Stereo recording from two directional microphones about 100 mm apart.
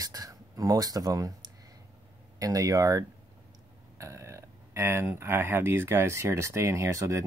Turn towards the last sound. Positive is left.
turn(degrees=-30)  # may be behind; listen again after turning